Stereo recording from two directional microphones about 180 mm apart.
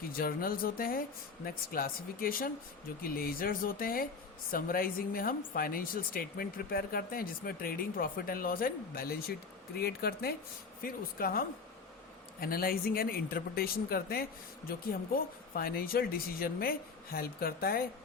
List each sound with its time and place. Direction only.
0.0 s speech: 55° left (ahead or behind)